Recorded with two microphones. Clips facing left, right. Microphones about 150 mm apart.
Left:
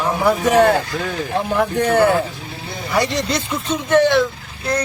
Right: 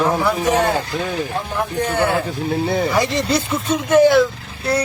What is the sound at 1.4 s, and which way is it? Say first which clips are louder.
Speech: left 4 dB; 70° left (ahead or behind).